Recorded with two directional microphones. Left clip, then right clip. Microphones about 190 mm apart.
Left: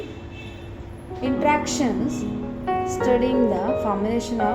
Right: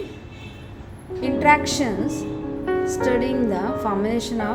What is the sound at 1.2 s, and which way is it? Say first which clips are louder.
Speech: right 4 dB; 40° right (ahead or behind).